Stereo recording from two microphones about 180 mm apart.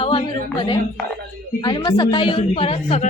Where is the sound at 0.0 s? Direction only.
30° left (ahead or behind).